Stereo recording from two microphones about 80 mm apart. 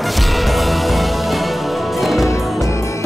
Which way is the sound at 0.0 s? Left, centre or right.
Centre.